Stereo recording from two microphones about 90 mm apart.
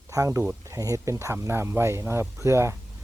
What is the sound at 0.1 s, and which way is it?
Speech, 35° right (ahead or behind).